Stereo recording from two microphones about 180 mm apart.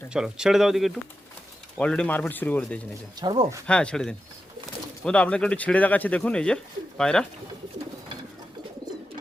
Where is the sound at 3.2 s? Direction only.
25° right (ahead or behind).